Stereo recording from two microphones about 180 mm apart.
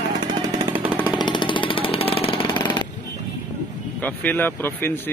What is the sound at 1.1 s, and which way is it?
Jackhammer, 25° left (ahead or behind).